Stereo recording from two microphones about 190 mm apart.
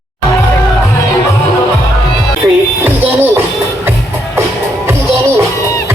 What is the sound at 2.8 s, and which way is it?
Music, 10° right (ahead or behind).